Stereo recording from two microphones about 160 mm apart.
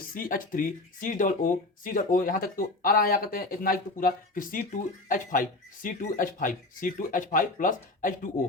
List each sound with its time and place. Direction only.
0.1 s speech: 60° left (ahead or behind)